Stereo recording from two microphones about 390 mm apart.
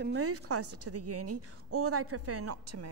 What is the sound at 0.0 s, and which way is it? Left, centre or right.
A woman's voice, right.